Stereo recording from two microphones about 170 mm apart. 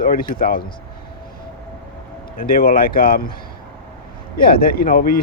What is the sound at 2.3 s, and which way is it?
Speech, 60° left (ahead or behind).